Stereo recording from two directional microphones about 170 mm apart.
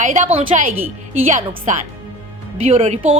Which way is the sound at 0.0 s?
45° right (ahead or behind).